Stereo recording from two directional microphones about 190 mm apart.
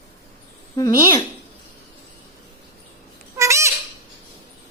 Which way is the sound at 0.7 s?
20° left (ahead or behind).